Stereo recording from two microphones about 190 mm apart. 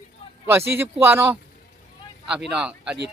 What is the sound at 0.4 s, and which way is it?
Speech, 10° right (ahead or behind).